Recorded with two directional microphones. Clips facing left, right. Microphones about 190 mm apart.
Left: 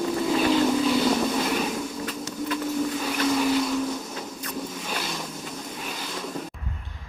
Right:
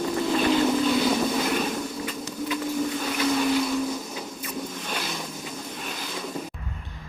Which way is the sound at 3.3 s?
Centre (ahead or behind).